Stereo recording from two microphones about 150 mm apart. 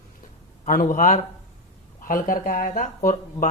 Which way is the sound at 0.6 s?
65° left (ahead or behind).